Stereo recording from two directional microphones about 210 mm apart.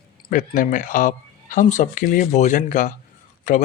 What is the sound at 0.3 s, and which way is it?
Speech, 40° left (ahead or behind).